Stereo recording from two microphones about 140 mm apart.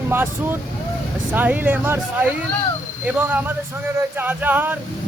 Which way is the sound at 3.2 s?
15° right (ahead or behind).